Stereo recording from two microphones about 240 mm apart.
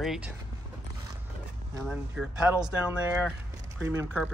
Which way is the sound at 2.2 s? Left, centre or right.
Centre.